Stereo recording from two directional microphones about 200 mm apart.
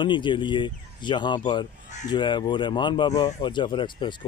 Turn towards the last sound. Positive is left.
turn(degrees=25)  # may be behind; listen again after turning